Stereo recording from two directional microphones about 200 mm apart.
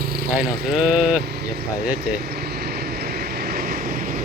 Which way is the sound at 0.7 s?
5° right (ahead or behind).